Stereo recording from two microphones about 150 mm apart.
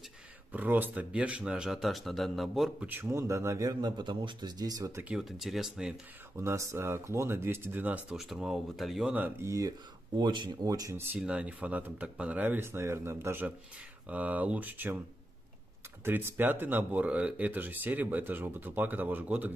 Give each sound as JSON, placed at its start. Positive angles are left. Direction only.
{"t": 0.5, "sound": "speech", "side_deg": -10}
{"t": 2.9, "sound": "speech", "side_deg": -15}
{"t": 5.0, "sound": "speech", "side_deg": 0}
{"t": 6.3, "sound": "speech", "side_deg": -20}
{"t": 16.0, "sound": "speech", "side_deg": -15}